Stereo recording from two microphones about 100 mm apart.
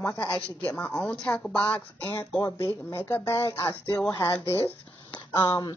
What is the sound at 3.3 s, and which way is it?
Speech, 35° left (ahead or behind).